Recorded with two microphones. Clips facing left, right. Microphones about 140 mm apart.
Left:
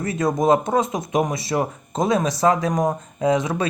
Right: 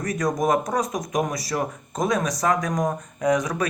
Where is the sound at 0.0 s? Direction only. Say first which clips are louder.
Left 3 dB; 25° left (ahead or behind).